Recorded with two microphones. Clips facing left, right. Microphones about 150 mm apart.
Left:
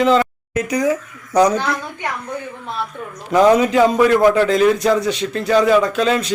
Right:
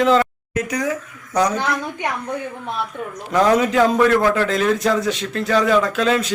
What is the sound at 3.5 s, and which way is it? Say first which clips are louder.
Speech: left 2 dB; centre (ahead or behind).